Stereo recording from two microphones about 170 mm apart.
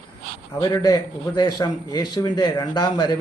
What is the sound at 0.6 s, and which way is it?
Speech, 20° left (ahead or behind).